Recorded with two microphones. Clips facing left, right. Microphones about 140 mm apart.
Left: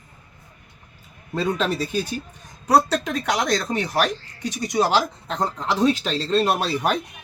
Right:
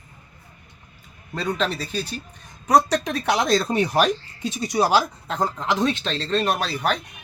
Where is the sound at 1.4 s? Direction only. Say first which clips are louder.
Left 2 dB; 5° left (ahead or behind).